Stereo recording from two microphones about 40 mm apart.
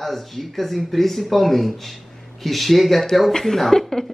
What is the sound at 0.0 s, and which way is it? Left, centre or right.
Speech, centre.